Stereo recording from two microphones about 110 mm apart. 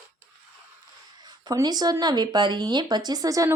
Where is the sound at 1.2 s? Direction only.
35° right (ahead or behind).